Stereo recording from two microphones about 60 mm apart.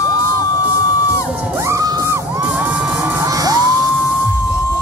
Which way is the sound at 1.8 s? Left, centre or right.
Right.